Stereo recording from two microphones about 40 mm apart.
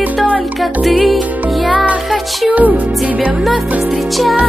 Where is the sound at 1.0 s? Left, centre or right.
Centre.